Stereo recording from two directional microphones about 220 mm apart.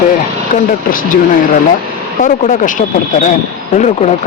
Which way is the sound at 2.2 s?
35° left (ahead or behind).